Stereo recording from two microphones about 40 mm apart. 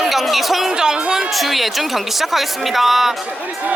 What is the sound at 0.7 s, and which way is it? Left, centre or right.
Speech, centre.